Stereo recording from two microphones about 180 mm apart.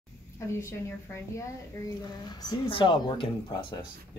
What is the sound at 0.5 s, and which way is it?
Speech, 15° left (ahead or behind).